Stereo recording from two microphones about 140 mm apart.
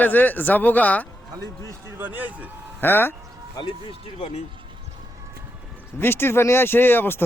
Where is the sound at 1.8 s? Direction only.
15° right (ahead or behind).